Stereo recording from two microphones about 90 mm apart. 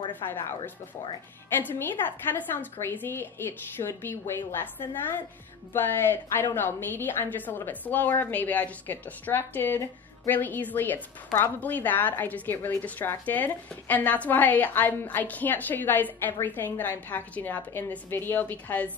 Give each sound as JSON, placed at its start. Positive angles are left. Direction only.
{"t": 0.2, "sound": "speech", "side_deg": 45}
{"t": 1.6, "sound": "a woman's voice", "side_deg": 25}
{"t": 5.7, "sound": "a woman's voice", "side_deg": 25}